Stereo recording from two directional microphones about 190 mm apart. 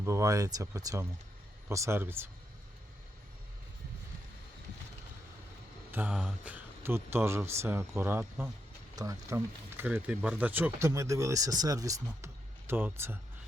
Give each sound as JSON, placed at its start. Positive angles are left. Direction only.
{"t": 0.0, "sound": "speech", "side_deg": -15}
{"t": 5.9, "sound": "speech", "side_deg": -10}